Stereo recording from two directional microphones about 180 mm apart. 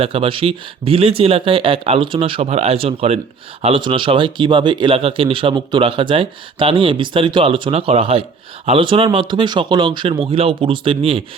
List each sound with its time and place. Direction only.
0.0 s speech: 30° right (ahead or behind)